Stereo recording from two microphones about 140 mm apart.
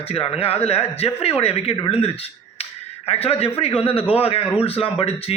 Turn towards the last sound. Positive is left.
turn(degrees=45)  # may be behind; listen again after turning